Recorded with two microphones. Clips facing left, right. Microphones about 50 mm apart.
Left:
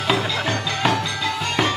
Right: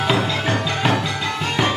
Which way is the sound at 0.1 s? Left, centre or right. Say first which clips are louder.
Left 2 dB; centre.